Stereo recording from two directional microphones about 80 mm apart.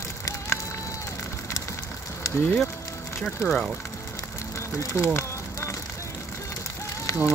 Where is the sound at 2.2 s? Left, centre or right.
Left.